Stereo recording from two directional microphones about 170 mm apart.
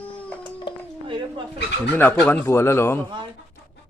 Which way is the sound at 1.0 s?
30° right (ahead or behind).